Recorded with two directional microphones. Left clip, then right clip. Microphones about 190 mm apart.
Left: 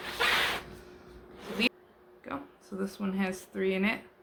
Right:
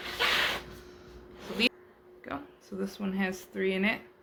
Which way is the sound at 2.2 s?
15° right (ahead or behind).